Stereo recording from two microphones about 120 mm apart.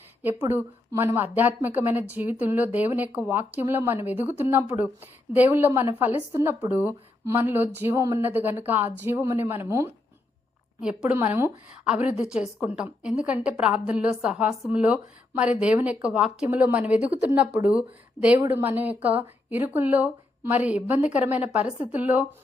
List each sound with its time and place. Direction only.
0.2 s a woman's voice: 15° right (ahead or behind)
7.9 s speech: 30° right (ahead or behind)
8.2 s a woman's voice: 15° right (ahead or behind)
10.8 s a woman's voice: 5° right (ahead or behind)